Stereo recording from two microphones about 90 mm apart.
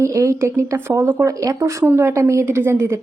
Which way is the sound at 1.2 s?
35° right (ahead or behind).